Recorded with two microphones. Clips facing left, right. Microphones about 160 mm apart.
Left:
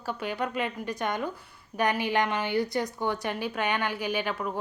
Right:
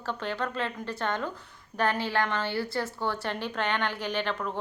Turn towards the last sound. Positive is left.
turn(degrees=10)  # may be behind; listen again after turning